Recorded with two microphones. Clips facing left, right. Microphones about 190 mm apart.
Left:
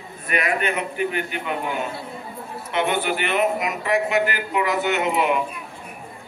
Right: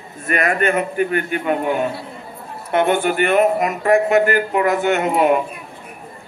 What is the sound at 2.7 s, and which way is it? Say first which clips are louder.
A man's voice: right 6 dB; 50° right (ahead or behind).